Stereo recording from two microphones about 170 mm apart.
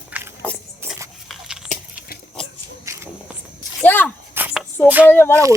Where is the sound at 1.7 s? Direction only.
55° left (ahead or behind).